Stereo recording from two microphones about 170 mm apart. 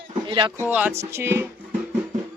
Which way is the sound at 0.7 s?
10° right (ahead or behind).